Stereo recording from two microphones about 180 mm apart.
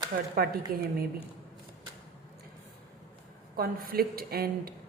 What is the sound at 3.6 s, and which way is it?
A woman's voice, 55° right (ahead or behind).